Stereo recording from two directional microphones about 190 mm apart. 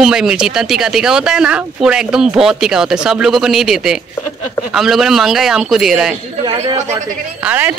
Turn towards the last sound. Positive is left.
turn(degrees=-10)  # may be behind; listen again after turning